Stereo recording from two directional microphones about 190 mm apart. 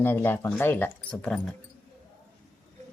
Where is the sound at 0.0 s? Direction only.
10° left (ahead or behind).